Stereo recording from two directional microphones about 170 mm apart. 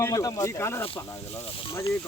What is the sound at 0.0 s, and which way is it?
Speech, 20° left (ahead or behind).